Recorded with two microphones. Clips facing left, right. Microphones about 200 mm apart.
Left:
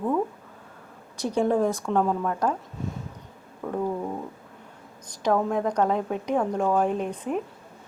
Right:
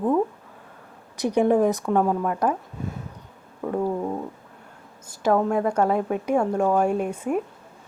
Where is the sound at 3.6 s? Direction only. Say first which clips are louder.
Right 4 dB; 5° right (ahead or behind).